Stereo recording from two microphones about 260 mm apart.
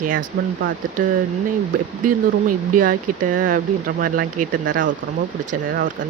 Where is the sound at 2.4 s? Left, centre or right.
Right.